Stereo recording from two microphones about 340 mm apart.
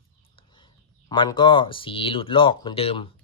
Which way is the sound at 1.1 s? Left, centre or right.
Centre.